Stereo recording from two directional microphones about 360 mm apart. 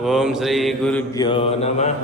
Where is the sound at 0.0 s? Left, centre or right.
Centre.